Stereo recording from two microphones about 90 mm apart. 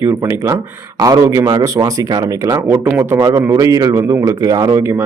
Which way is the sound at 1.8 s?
40° right (ahead or behind).